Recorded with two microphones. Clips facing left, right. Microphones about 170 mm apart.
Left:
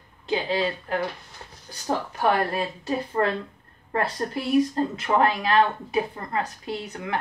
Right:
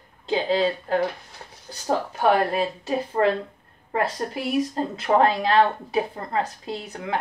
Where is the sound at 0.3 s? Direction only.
25° right (ahead or behind).